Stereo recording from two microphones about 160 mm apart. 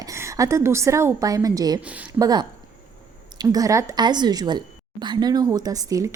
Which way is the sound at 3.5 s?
20° right (ahead or behind).